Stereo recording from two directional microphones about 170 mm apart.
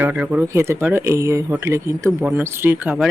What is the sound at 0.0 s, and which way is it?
Speech, 10° right (ahead or behind).